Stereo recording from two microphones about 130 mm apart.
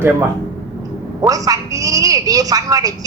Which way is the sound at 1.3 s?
25° right (ahead or behind).